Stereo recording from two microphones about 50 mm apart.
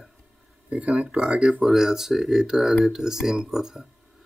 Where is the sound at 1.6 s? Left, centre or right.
Centre.